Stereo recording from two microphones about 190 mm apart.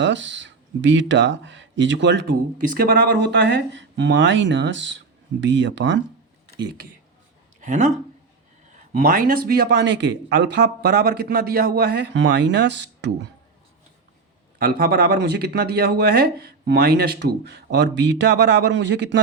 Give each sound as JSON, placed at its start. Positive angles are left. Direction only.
{"t": 0.0, "sound": "speech", "side_deg": -70}
{"t": 2.6, "sound": "speech", "side_deg": -50}
{"t": 7.6, "sound": "a man's voice", "side_deg": -40}
{"t": 14.6, "sound": "a man's voice", "side_deg": -55}